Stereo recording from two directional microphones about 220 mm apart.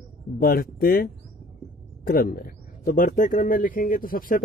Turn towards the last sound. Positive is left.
turn(degrees=40)  # may be behind; listen again after turning